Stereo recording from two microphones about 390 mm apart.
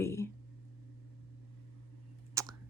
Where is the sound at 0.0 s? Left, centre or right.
Centre.